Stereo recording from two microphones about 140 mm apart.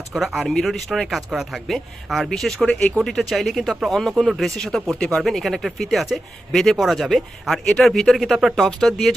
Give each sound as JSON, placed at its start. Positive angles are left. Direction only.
{"t": 0.1, "sound": "speech", "side_deg": 0}